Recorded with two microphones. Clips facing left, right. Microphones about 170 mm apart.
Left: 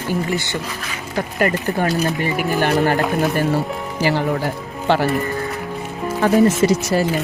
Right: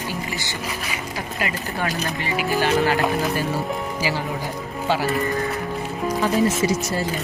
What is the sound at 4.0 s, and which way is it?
Speech, 60° left (ahead or behind).